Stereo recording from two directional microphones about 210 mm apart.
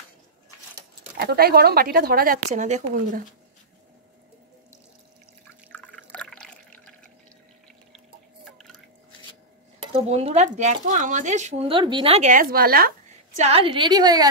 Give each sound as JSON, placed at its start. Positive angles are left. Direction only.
{"t": 0.7, "sound": "speech", "side_deg": -50}
{"t": 5.7, "sound": "water", "side_deg": 5}
{"t": 8.5, "sound": "a sound", "side_deg": 0}
{"t": 9.9, "sound": "speech", "side_deg": -30}